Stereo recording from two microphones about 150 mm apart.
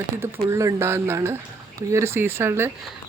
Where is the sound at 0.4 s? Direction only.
20° right (ahead or behind).